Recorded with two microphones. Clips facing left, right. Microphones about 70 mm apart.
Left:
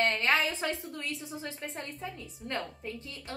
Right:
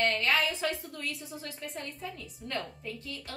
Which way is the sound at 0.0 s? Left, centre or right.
Left.